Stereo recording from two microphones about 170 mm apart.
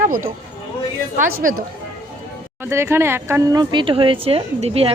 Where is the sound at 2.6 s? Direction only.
15° right (ahead or behind).